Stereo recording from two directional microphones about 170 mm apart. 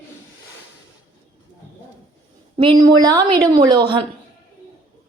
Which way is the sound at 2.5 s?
30° right (ahead or behind).